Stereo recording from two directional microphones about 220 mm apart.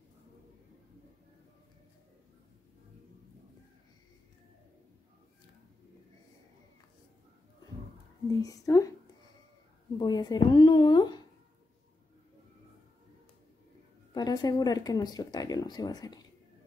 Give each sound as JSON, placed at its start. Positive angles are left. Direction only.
{"t": 8.4, "sound": "speech", "side_deg": 15}
{"t": 9.9, "sound": "a woman's voice", "side_deg": 20}
{"t": 14.1, "sound": "speech", "side_deg": 20}